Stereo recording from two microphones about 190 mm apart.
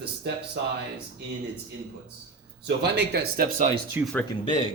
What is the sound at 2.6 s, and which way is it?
Speech, 55° right (ahead or behind).